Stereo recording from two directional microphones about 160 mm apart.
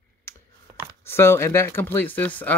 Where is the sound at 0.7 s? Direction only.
20° right (ahead or behind).